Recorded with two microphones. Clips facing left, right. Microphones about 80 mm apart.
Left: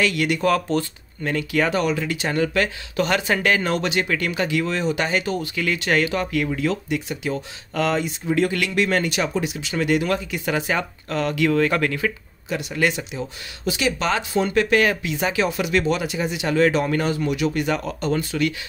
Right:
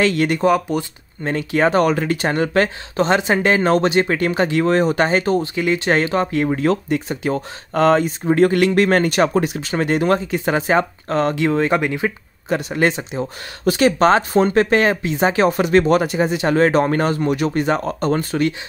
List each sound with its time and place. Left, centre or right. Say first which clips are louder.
0.0 s speech: right 4 dB; right
0.5 s speech: right 1 dB; centre
1.2 s speech: right 4 dB; right
1.8 s speech: right 6 dB; right
12.4 s speech: right 4 dB; right